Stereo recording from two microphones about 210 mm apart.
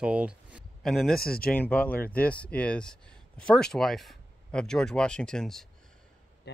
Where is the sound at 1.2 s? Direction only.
45° left (ahead or behind).